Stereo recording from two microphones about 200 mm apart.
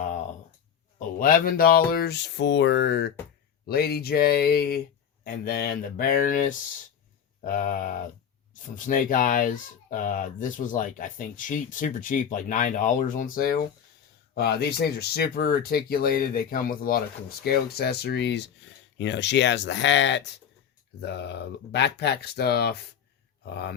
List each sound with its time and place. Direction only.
0.9 s speech: 45° left (ahead or behind)